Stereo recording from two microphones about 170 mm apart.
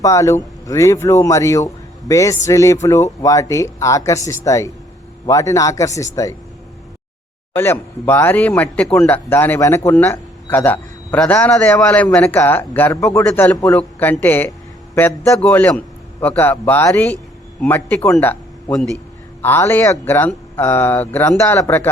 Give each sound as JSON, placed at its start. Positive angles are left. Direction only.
{"t": 0.0, "sound": "a man's voice", "side_deg": 20}
{"t": 7.5, "sound": "speech", "side_deg": 10}